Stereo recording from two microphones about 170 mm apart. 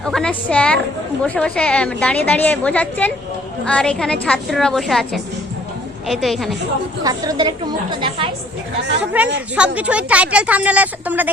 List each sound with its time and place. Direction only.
0.0 s a woman's voice: 5° left (ahead or behind)
7.0 s a woman's voice: 20° right (ahead or behind)
9.2 s a woman's voice: 10° right (ahead or behind)